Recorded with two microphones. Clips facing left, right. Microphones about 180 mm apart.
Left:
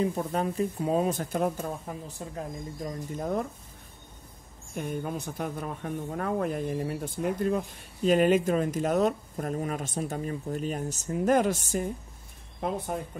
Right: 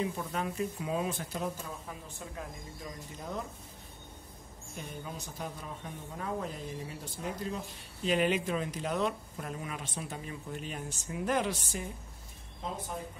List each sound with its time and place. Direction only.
0.0 s speech: 40° left (ahead or behind)
2.0 s speech: 40° left (ahead or behind)
4.7 s speech: 55° left (ahead or behind)
12.5 s speech: 60° left (ahead or behind)